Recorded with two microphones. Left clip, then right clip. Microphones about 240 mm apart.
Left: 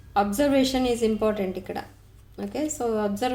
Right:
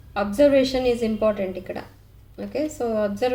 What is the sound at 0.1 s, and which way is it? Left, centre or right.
Speech, left.